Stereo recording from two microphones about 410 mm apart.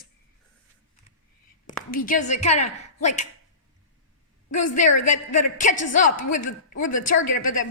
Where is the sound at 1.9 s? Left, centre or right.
Centre.